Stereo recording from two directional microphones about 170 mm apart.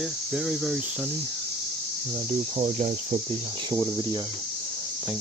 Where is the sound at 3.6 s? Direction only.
20° right (ahead or behind).